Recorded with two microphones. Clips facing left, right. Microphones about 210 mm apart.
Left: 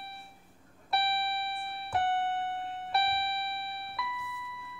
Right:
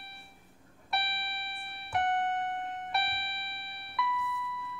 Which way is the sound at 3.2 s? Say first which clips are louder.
Left 9 dB; 55° right (ahead or behind).